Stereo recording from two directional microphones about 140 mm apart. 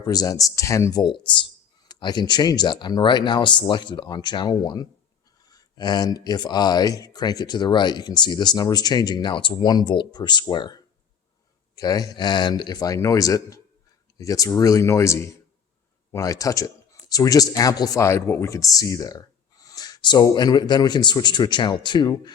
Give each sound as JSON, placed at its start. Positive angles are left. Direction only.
{"t": 0.0, "sound": "speech", "side_deg": 25}